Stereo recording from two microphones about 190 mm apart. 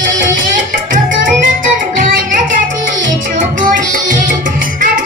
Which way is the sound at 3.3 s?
45° right (ahead or behind).